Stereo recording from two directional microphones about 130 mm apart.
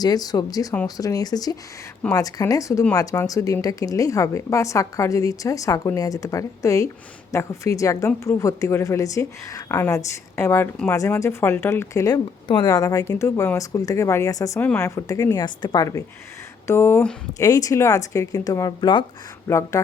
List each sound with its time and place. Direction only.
0.0 s speech: 30° left (ahead or behind)
19.5 s speech: 20° left (ahead or behind)